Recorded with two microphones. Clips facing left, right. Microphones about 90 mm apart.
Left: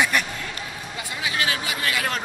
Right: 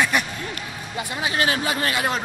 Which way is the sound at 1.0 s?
25° right (ahead or behind).